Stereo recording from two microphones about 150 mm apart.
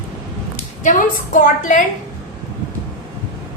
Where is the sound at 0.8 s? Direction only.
60° left (ahead or behind).